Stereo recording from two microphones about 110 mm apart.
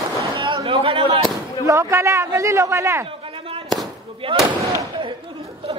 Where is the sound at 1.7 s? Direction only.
25° right (ahead or behind).